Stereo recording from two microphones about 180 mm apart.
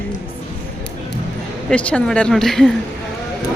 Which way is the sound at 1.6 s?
5° left (ahead or behind).